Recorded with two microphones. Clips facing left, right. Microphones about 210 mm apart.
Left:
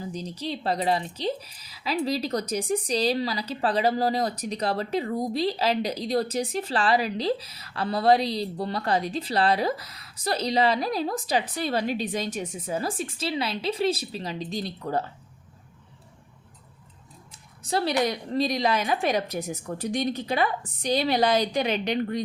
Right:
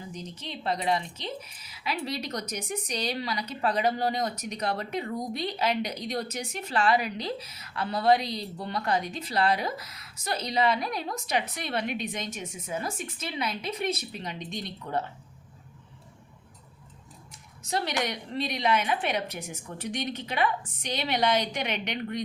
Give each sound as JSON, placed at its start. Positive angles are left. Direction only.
{"t": 0.1, "sound": "speech", "side_deg": 35}
{"t": 17.6, "sound": "a woman's voice", "side_deg": 35}